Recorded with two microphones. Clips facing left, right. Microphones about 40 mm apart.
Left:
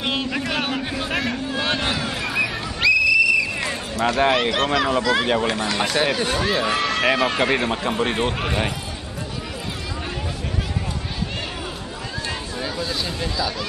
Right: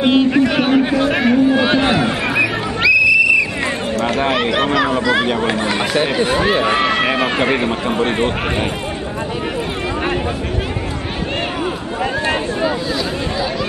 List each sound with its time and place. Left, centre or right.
0.0 s a sound: centre
4.2 s speech: centre
5.4 s speech: right